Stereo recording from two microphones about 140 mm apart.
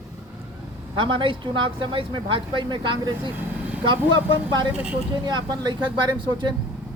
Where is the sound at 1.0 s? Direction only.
35° right (ahead or behind).